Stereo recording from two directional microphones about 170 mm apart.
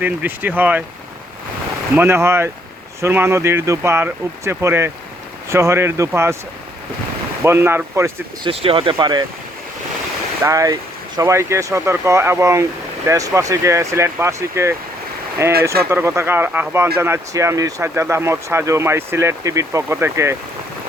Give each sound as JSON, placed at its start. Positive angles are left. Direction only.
{"t": 0.0, "sound": "speech", "side_deg": -10}
{"t": 2.0, "sound": "speech", "side_deg": -15}
{"t": 7.4, "sound": "speech", "side_deg": -15}
{"t": 8.4, "sound": "speech", "side_deg": -30}
{"t": 10.4, "sound": "speech", "side_deg": -20}